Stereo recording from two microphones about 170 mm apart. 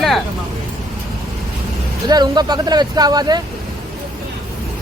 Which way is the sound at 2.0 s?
25° right (ahead or behind).